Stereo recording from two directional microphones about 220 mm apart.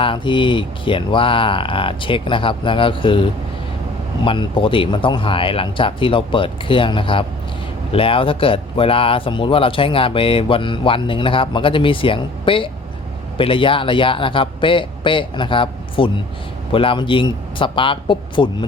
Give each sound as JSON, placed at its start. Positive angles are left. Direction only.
{"t": 0.0, "sound": "speech", "side_deg": 20}